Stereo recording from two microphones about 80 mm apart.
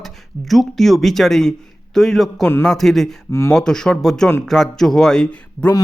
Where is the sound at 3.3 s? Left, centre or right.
Left.